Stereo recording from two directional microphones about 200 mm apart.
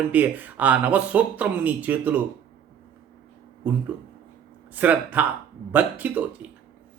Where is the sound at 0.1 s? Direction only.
10° right (ahead or behind).